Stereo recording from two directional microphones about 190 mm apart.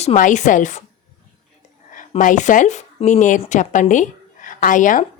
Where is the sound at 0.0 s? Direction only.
40° left (ahead or behind).